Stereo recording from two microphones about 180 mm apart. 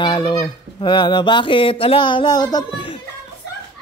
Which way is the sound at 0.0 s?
25° left (ahead or behind).